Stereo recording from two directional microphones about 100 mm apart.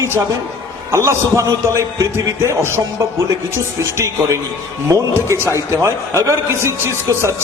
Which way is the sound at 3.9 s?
30° right (ahead or behind).